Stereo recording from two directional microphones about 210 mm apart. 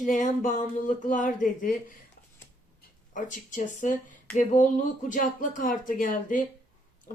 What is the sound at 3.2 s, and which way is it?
Speech, 35° left (ahead or behind).